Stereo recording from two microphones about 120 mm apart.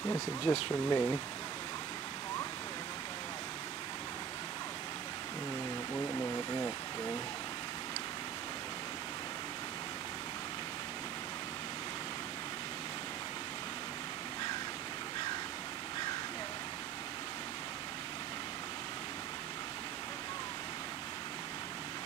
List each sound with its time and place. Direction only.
0.4 s speech: 50° left (ahead or behind)
0.8 s speech: 35° left (ahead or behind)
5.9 s a sound: 20° left (ahead or behind)
6.3 s vehicle: 35° left (ahead or behind)